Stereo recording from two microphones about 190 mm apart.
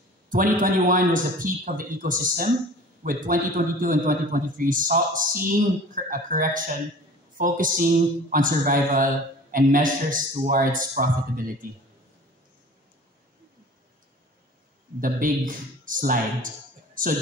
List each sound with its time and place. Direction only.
0.3 s a man's voice: 45° right (ahead or behind)
15.0 s a man's voice: 45° right (ahead or behind)